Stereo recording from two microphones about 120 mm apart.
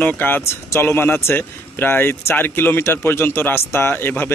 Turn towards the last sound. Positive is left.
turn(degrees=15)  # may be behind; listen again after turning